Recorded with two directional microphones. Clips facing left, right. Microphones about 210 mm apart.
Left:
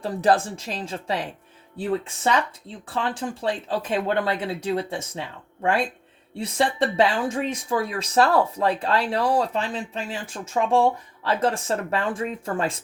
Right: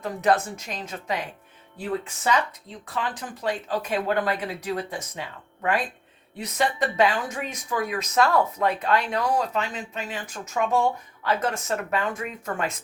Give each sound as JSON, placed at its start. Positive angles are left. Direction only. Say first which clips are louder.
{"t": 0.0, "sound": "speech", "louder": "left 2 dB", "side_deg": 30}
{"t": 2.8, "sound": "speech", "louder": "left 4 dB", "side_deg": 30}
{"t": 6.3, "sound": "speech", "louder": "left 2 dB", "side_deg": 30}